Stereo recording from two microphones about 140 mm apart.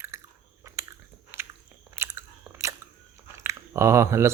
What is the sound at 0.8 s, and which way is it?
Biting, 20° right (ahead or behind).